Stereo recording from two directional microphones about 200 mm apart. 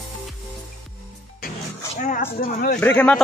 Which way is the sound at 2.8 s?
10° left (ahead or behind).